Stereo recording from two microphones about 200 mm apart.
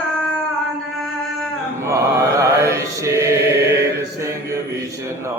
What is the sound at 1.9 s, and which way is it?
Mantra, 15° right (ahead or behind).